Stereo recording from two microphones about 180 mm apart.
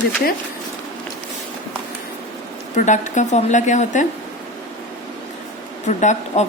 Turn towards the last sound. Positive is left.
turn(degrees=40)  # may be behind; listen again after turning